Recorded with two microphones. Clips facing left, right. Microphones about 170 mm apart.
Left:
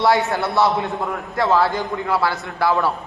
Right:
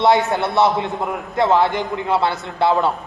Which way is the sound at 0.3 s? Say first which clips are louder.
Right 2 dB; 20° right (ahead or behind).